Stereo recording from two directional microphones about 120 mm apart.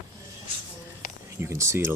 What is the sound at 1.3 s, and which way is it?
Speech, 25° right (ahead or behind).